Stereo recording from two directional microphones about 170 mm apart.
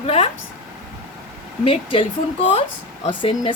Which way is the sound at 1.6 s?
30° left (ahead or behind).